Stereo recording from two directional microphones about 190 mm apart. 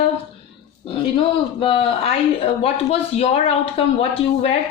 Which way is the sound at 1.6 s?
25° left (ahead or behind).